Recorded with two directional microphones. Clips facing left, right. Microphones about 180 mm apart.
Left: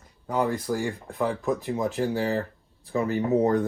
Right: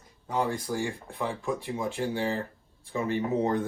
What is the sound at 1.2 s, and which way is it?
Speech, 40° left (ahead or behind).